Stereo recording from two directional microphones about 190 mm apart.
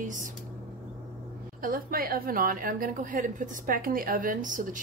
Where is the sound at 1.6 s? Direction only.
50° right (ahead or behind).